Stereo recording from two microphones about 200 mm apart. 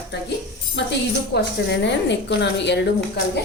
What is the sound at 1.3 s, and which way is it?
Speech, 60° left (ahead or behind).